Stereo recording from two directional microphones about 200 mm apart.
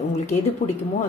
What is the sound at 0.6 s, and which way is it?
Speech, 30° left (ahead or behind).